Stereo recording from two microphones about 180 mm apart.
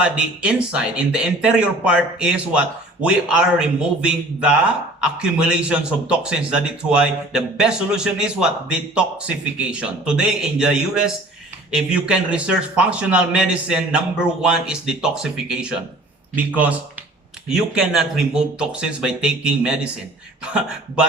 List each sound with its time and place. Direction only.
0.0 s speech: 5° right (ahead or behind)